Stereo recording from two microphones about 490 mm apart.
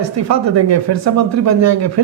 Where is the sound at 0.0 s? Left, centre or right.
Right.